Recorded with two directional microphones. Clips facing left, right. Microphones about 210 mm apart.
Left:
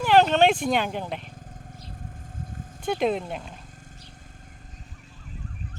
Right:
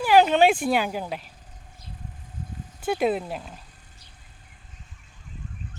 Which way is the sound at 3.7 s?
45° left (ahead or behind).